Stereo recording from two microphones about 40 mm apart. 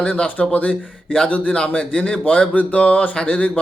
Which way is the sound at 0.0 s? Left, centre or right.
Left.